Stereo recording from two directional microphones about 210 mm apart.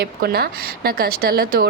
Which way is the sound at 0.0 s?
50° right (ahead or behind).